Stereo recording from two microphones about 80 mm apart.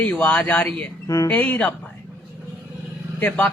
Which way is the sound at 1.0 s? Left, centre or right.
Left.